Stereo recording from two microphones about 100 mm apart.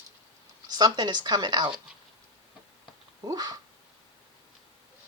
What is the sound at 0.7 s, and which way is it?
Speech, 40° right (ahead or behind).